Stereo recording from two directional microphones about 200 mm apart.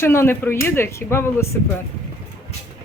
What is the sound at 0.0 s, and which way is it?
Speech, 10° left (ahead or behind).